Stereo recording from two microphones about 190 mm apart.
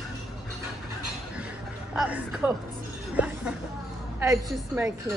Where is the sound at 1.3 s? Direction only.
5° right (ahead or behind).